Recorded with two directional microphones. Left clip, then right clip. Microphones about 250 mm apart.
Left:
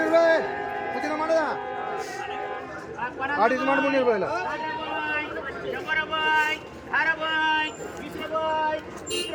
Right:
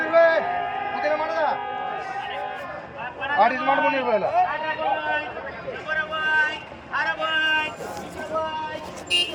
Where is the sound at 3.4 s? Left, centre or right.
Centre.